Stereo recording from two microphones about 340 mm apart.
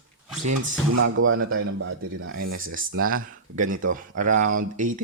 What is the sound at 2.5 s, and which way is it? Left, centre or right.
Speech, right.